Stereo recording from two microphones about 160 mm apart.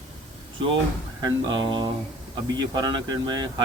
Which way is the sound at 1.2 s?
30° right (ahead or behind).